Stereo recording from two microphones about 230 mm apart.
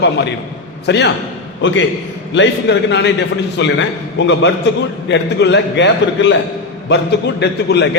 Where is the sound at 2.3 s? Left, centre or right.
Left.